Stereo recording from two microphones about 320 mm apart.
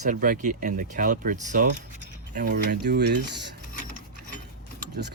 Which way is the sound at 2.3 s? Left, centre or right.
Right.